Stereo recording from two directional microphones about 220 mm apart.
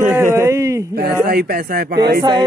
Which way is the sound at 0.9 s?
45° right (ahead or behind).